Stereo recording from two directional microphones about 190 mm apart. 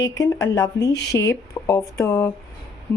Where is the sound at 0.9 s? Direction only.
65° left (ahead or behind).